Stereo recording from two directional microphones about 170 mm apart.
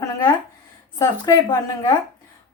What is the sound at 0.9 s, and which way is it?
Speech, 20° left (ahead or behind).